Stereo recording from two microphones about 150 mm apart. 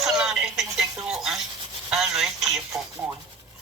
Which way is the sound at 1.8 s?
5° right (ahead or behind).